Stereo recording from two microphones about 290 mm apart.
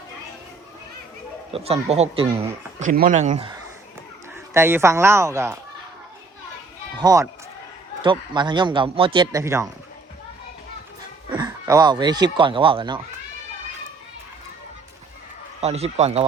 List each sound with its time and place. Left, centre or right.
1.5 s speech: right
3.3 s speech: centre
7.0 s speech: centre
11.3 s speech: centre
15.6 s speech: right